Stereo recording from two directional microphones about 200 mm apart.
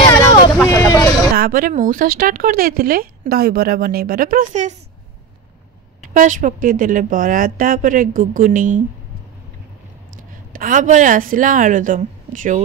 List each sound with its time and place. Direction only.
0.7 s vehicle: 15° left (ahead or behind)
1.3 s speech: 45° right (ahead or behind)
6.0 s a woman's voice: 40° right (ahead or behind)
10.5 s a woman's voice: 40° right (ahead or behind)